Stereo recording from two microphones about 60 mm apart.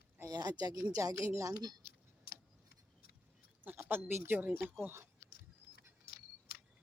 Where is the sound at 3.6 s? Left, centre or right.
Right.